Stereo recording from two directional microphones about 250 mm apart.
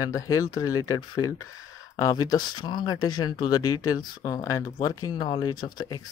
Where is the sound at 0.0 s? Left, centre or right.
Centre.